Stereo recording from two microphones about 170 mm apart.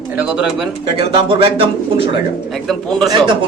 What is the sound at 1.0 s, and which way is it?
Speech, 35° right (ahead or behind).